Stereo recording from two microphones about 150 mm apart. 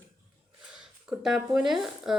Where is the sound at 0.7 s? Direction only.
5° right (ahead or behind).